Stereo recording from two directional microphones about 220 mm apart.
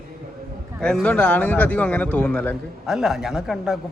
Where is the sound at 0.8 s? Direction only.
5° left (ahead or behind).